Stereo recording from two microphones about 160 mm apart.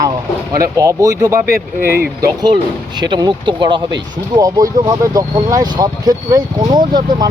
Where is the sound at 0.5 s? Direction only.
20° right (ahead or behind).